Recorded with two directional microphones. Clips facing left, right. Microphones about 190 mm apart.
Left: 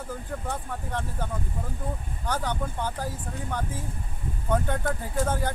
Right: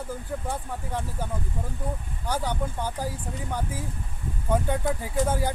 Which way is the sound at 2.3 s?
10° right (ahead or behind).